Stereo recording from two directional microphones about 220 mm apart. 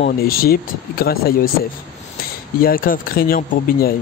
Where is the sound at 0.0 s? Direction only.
45° left (ahead or behind).